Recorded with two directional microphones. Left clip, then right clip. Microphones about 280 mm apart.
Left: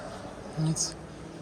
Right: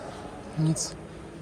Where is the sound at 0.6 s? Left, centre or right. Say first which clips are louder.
Right 2 dB; centre.